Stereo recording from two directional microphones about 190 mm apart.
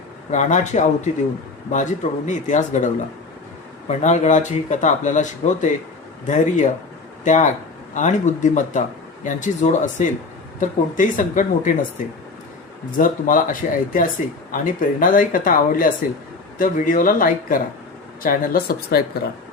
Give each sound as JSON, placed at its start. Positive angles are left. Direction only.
{"t": 0.3, "sound": "speech", "side_deg": 40}
{"t": 13.0, "sound": "speech", "side_deg": 45}